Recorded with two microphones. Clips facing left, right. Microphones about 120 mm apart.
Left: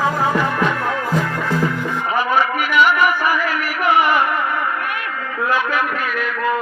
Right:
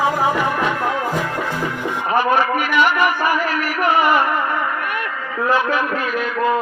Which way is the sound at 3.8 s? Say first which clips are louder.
Even; 40° right (ahead or behind).